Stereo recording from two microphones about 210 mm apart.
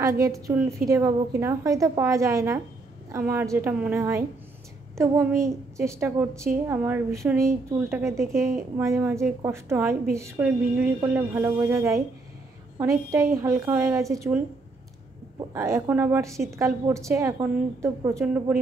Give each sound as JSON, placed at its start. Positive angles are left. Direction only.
{"t": 0.2, "sound": "a woman's voice", "side_deg": -15}